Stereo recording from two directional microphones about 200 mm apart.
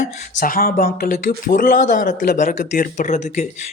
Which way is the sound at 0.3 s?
45° left (ahead or behind).